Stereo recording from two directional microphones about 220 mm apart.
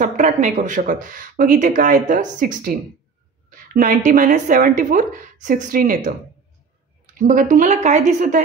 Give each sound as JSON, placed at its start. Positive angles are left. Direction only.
{"t": 0.0, "sound": "speech", "side_deg": -35}
{"t": 7.2, "sound": "speech", "side_deg": -35}